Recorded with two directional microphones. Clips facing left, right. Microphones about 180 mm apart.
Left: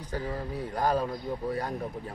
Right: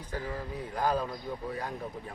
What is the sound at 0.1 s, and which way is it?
Speech, 35° left (ahead or behind).